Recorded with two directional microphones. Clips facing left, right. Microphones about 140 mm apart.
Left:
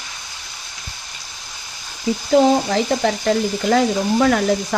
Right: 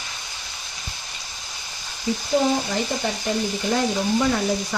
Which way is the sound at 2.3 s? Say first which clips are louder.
Left 7 dB; 85° left.